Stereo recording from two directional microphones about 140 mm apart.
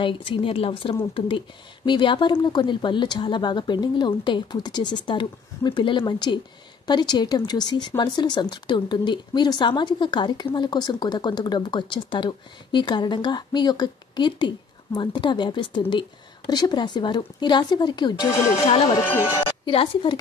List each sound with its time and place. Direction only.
0.0 s speech: 40° left (ahead or behind)
18.7 s speech: 45° left (ahead or behind)